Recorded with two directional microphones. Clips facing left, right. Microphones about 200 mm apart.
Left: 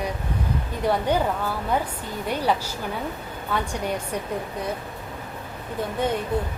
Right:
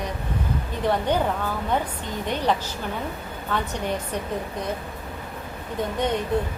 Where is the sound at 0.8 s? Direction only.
10° left (ahead or behind).